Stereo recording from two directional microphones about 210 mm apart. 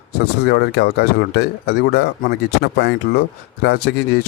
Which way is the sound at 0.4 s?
50° left (ahead or behind).